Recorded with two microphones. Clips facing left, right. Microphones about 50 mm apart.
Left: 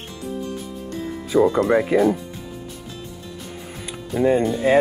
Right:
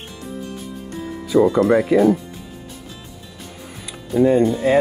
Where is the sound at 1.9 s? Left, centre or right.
Left.